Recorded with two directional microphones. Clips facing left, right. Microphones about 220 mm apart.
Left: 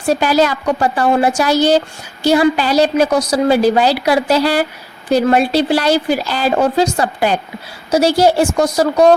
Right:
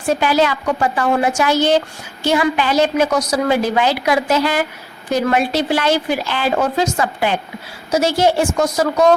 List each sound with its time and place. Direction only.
0.1 s a woman's voice: 40° left (ahead or behind)